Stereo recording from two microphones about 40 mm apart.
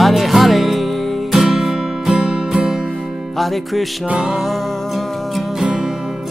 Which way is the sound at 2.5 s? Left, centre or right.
Centre.